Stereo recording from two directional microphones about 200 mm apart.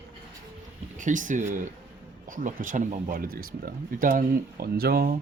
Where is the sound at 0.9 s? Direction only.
40° right (ahead or behind).